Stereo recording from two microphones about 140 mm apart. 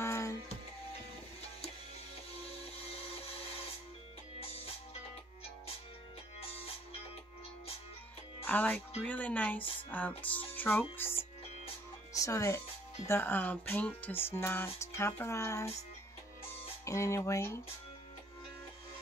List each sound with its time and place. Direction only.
0.0 s music: 20° left (ahead or behind)
2.4 s a sound: 45° left (ahead or behind)
8.5 s speech: 10° left (ahead or behind)
16.8 s speech: 20° left (ahead or behind)